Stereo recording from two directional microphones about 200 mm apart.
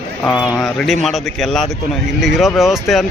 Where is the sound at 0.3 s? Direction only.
20° left (ahead or behind).